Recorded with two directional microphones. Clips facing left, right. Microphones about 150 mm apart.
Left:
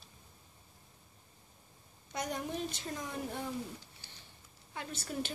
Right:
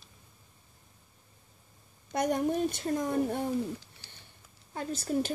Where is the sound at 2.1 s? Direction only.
55° right (ahead or behind).